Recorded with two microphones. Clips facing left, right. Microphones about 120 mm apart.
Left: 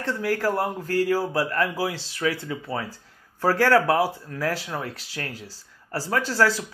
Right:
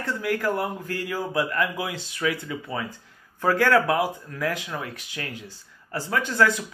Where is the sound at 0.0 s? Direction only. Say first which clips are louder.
Left 1 dB; 30° left (ahead or behind).